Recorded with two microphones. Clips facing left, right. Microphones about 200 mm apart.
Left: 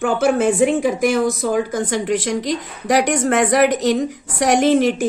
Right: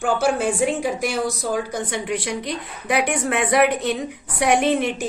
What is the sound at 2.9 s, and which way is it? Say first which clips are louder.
Speech: left 5 dB; 40° left (ahead or behind).